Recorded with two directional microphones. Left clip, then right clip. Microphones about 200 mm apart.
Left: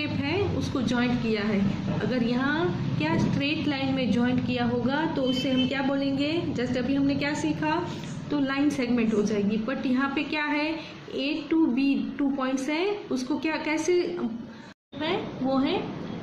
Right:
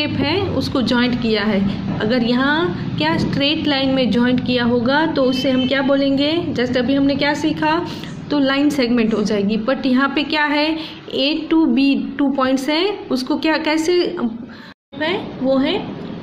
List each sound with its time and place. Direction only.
0.0 s a woman's voice: 40° right (ahead or behind)
15.0 s a woman's voice: 25° right (ahead or behind)